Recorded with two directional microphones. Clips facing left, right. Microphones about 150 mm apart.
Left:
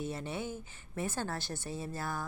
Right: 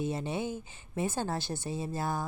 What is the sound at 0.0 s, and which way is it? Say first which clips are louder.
Speech: right 5 dB; 20° right (ahead or behind).